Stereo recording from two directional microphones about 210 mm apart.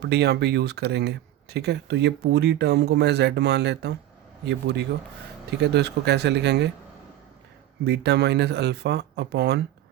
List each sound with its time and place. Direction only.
0.0 s speech: 50° right (ahead or behind)
7.9 s speech: 50° right (ahead or behind)